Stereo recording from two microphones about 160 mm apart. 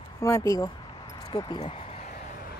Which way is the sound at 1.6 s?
40° left (ahead or behind).